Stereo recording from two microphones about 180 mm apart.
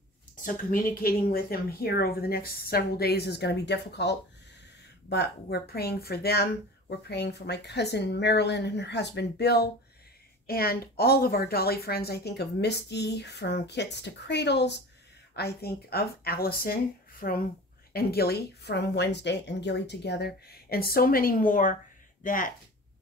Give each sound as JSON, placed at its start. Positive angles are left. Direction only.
{"t": 0.4, "sound": "a woman's voice", "side_deg": 45}